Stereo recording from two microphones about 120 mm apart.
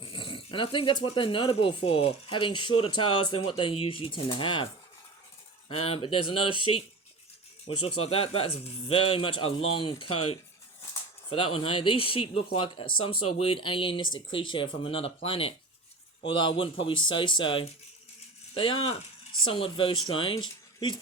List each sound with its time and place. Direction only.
0.0 s speech: 45° left (ahead or behind)
5.6 s speech: 55° left (ahead or behind); by 20.9 s 40° left (ahead or behind)